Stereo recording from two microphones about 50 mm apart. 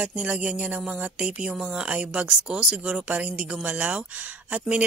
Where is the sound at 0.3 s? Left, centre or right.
Right.